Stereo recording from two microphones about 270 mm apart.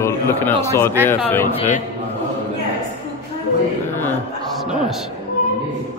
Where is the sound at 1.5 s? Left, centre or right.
Left.